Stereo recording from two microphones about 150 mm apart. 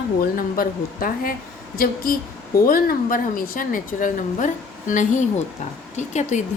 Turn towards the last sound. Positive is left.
turn(degrees=55)  # may be behind; listen again after turning